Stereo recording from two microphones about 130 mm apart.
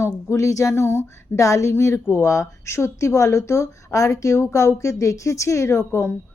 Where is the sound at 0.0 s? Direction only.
25° left (ahead or behind).